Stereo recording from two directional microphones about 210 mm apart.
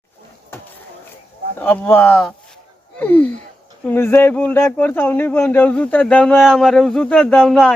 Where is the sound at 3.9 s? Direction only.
10° left (ahead or behind).